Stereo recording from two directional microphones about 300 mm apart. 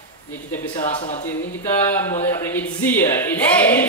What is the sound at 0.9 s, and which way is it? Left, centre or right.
Speech, left.